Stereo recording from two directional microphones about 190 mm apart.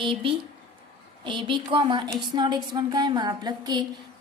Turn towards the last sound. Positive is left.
turn(degrees=-20)  # may be behind; listen again after turning